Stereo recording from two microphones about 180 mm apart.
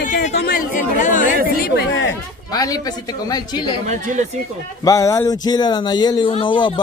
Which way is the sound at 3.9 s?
40° right (ahead or behind).